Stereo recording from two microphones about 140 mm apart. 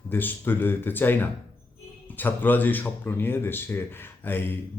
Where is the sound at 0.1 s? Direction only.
15° left (ahead or behind).